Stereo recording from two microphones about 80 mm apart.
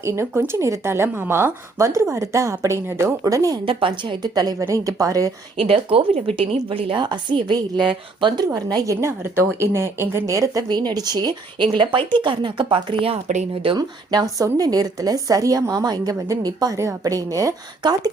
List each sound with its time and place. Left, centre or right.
0.0 s speech: right
3.2 s a woman's voice: right
3.7 s a woman's voice: right
4.6 s a woman's voice: right
5.5 s a woman's voice: right
8.5 s speech: right
10.7 s speech: right
12.2 s a woman's voice: right
13.7 s a woman's voice: right
17.8 s speech: right